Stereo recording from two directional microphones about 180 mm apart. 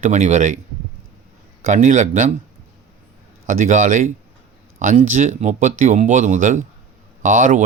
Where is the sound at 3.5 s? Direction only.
45° right (ahead or behind).